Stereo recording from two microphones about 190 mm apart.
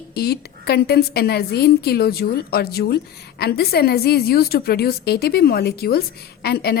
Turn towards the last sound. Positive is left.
turn(degrees=55)  # may be behind; listen again after turning